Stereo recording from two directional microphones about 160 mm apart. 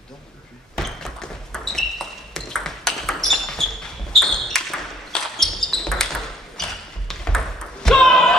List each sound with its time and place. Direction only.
1.0 s ping: 5° left (ahead or behind)
4.2 s basketball bounce: centre (ahead or behind)
6.5 s ping: 5° left (ahead or behind)